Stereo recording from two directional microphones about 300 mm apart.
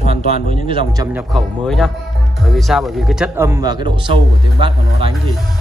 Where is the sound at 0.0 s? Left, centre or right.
Centre.